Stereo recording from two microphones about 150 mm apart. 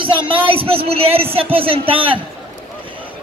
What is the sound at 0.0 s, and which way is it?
Speech, 35° right (ahead or behind).